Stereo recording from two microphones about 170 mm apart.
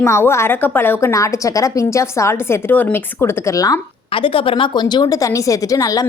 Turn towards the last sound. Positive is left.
turn(degrees=20)  # may be behind; listen again after turning